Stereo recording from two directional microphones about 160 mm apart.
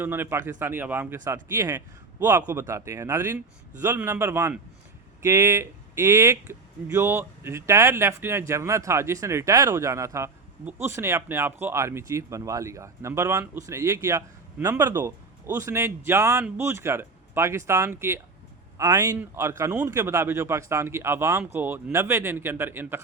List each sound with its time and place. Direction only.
0.0 s a man's voice: 15° right (ahead or behind)